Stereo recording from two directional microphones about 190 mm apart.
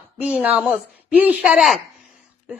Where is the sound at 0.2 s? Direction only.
5° right (ahead or behind).